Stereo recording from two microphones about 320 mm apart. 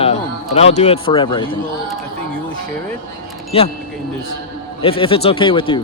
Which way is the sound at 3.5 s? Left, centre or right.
Centre.